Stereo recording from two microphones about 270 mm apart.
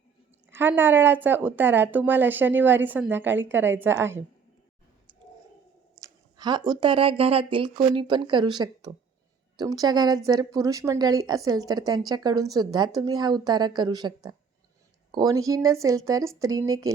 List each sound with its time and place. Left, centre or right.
0.4 s a woman's voice: centre
6.0 s a woman's voice: centre